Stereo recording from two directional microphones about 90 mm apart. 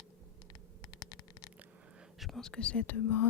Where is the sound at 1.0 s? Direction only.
45° left (ahead or behind).